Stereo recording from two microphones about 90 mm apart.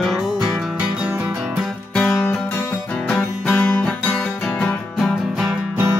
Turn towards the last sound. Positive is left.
turn(degrees=0)  # may be behind; listen again after turning